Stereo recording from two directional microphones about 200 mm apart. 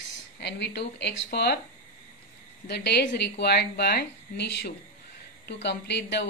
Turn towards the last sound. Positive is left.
turn(degrees=60)  # may be behind; listen again after turning